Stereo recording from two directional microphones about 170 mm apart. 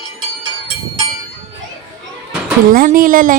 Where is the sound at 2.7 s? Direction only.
55° right (ahead or behind).